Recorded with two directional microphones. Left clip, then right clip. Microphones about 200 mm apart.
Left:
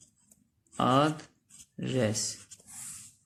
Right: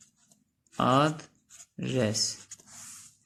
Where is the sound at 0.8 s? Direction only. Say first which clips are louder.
Right 1 dB; 20° right (ahead or behind).